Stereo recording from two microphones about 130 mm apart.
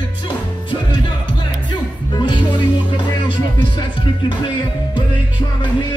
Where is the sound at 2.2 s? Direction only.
35° left (ahead or behind).